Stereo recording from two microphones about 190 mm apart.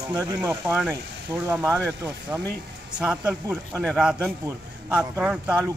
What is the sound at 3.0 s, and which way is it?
A man's voice, 5° right (ahead or behind).